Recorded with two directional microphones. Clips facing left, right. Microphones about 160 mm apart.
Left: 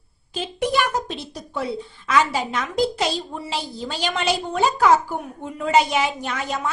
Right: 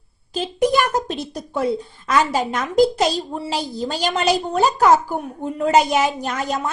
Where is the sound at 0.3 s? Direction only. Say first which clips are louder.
Right 4 dB; 40° right (ahead or behind).